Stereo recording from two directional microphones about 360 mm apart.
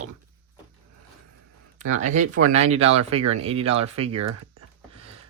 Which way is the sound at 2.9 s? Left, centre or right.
Centre.